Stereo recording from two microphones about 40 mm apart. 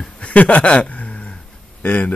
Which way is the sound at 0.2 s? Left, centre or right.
Left.